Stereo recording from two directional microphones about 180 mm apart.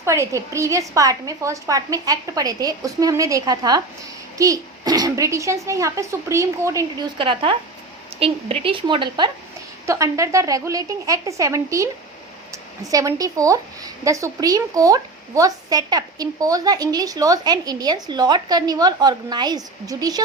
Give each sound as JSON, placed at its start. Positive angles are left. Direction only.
{"t": 0.0, "sound": "a woman's voice", "side_deg": -15}
{"t": 7.2, "sound": "a woman's voice", "side_deg": -30}
{"t": 12.9, "sound": "a woman's voice", "side_deg": -20}